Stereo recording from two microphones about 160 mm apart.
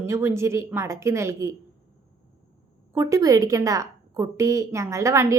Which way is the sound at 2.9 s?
20° right (ahead or behind).